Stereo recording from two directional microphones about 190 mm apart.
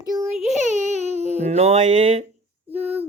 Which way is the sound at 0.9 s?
35° right (ahead or behind).